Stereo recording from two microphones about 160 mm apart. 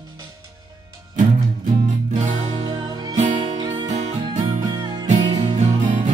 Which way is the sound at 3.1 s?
50° right (ahead or behind).